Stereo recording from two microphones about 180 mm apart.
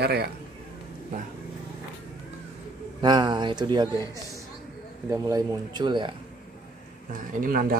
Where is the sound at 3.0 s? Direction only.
25° right (ahead or behind).